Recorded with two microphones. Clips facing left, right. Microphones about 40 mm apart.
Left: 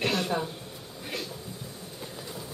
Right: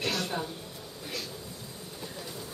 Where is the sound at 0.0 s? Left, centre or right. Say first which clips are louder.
Left 4 dB; left.